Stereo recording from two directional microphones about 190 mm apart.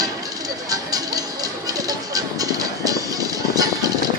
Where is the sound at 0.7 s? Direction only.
20° right (ahead or behind).